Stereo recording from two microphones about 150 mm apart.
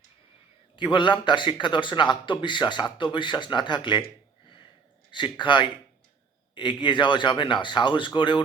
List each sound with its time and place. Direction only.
0.8 s a man's voice: 30° left (ahead or behind)
5.1 s a man's voice: 30° left (ahead or behind)